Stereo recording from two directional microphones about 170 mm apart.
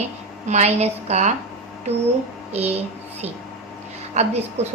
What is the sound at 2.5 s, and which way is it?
Speech, 40° right (ahead or behind).